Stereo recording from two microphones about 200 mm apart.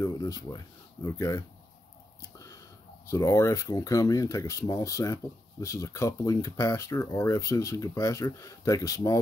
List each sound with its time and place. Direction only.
0.0 s a sound: 15° left (ahead or behind)
1.0 s speech: 15° left (ahead or behind)
3.1 s speech: 15° left (ahead or behind)